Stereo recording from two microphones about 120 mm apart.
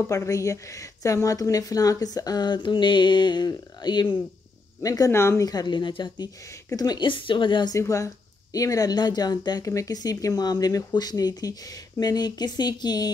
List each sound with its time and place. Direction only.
0.1 s a woman's voice: 25° left (ahead or behind)
5.5 s a woman's voice: 35° left (ahead or behind)
7.7 s a woman's voice: 25° left (ahead or behind)